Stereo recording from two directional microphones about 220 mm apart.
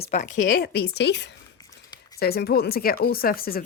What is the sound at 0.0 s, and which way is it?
A woman's voice, 30° left (ahead or behind).